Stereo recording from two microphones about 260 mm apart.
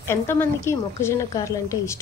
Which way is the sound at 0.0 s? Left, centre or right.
Centre.